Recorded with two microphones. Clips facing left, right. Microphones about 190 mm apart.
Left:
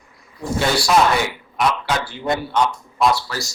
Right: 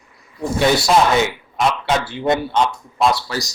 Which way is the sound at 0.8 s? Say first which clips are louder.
Right 2 dB; 25° right (ahead or behind).